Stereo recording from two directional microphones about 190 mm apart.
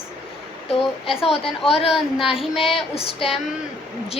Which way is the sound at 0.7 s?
30° left (ahead or behind).